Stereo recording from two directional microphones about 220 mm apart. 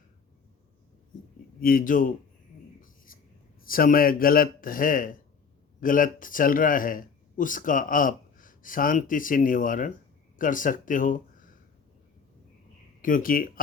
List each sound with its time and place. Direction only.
1.6 s a man's voice: 40° left (ahead or behind)
2.8 s writing: 40° left (ahead or behind)
3.6 s a man's voice: 40° left (ahead or behind)
13.0 s a man's voice: 40° left (ahead or behind)